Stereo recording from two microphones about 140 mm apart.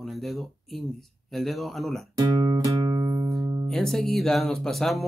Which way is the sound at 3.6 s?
5° left (ahead or behind).